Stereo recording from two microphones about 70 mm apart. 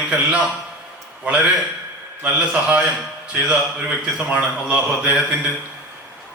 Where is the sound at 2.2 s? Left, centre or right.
Centre.